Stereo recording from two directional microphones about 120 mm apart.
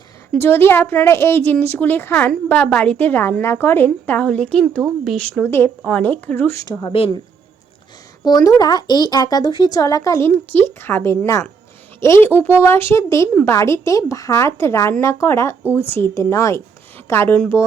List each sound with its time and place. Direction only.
0.3 s a woman's voice: 20° left (ahead or behind); by 5.4 s 5° left (ahead or behind)
5.4 s a woman's voice: 20° left (ahead or behind)
6.6 s speech: 25° left (ahead or behind)
6.8 s speech: 55° left (ahead or behind)
8.2 s speech: 35° left (ahead or behind)